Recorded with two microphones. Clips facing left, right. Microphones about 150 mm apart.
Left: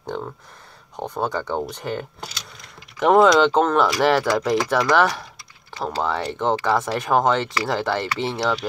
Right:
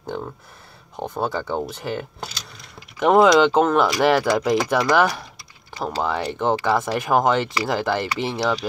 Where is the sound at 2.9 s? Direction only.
5° right (ahead or behind).